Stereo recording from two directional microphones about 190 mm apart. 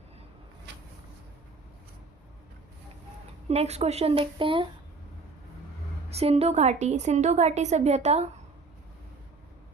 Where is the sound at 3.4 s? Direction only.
35° right (ahead or behind).